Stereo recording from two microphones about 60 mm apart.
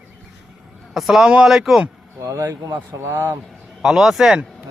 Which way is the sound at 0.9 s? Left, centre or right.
Centre.